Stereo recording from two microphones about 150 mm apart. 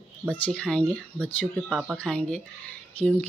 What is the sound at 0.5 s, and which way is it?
Speech, 5° left (ahead or behind).